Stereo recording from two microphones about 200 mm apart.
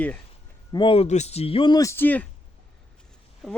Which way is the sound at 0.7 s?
25° left (ahead or behind).